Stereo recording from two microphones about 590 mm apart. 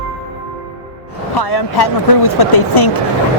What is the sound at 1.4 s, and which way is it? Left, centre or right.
Speech, left.